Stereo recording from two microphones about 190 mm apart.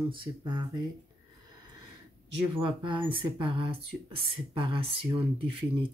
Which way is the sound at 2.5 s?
25° right (ahead or behind).